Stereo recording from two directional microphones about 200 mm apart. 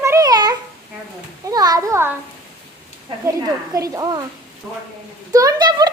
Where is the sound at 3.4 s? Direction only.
15° right (ahead or behind).